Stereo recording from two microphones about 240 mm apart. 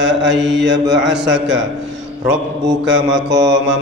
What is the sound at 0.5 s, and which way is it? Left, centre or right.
Mantra, right.